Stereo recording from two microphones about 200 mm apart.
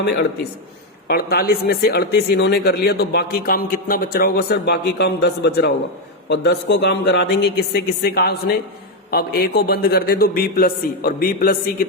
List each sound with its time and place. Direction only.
1.0 s a man's voice: 50° left (ahead or behind)